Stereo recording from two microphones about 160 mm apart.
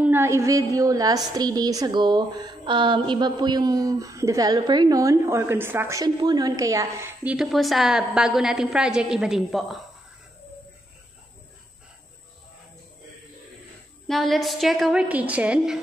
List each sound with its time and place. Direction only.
0.0 s a woman's voice: 15° right (ahead or behind)
7.3 s a woman's voice: centre (ahead or behind)
14.0 s a woman's voice: centre (ahead or behind)